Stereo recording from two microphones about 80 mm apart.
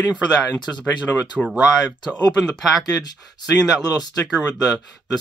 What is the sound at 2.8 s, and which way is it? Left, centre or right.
Speech, left.